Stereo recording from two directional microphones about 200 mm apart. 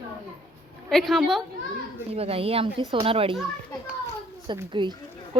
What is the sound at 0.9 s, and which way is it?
Speech, centre (ahead or behind).